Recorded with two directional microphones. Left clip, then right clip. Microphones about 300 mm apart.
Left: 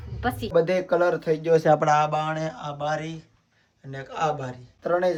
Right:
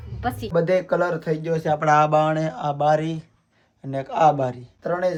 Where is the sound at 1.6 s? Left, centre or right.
Left.